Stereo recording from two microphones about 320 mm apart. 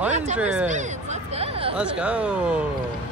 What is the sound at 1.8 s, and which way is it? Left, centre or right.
Speech, centre.